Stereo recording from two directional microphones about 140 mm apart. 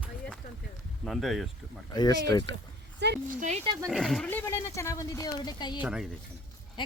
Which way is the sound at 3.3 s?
60° right (ahead or behind).